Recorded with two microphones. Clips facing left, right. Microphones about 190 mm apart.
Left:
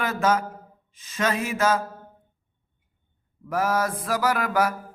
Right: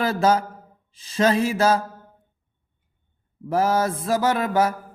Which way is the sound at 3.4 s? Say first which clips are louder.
Right 4 dB; 30° right (ahead or behind).